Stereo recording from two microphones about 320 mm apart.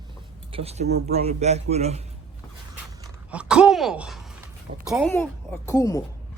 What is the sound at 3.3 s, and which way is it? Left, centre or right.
A woman's voice, centre.